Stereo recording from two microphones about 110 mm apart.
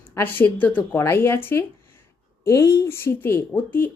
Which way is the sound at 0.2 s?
20° left (ahead or behind).